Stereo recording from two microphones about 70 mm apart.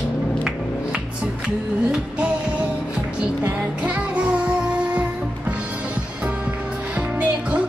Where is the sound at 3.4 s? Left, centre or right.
Centre.